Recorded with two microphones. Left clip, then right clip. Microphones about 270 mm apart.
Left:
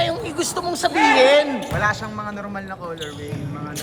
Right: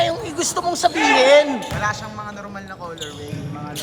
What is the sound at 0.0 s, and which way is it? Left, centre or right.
Speech, right.